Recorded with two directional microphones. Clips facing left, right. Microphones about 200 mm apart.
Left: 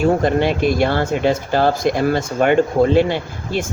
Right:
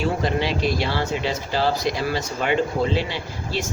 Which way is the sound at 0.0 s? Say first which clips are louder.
Left 7 dB; 50° left (ahead or behind).